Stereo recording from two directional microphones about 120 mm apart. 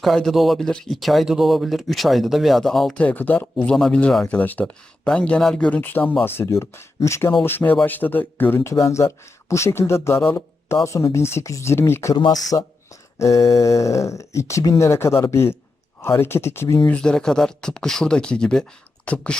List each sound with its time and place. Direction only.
0.0 s speech: centre (ahead or behind)
3.1 s speech: 15° left (ahead or behind)
12.1 s speech: 35° left (ahead or behind); by 16.7 s 20° left (ahead or behind)
16.8 s speech: 10° left (ahead or behind)